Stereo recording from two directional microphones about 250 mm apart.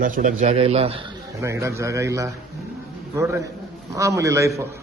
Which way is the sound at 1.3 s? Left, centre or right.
Centre.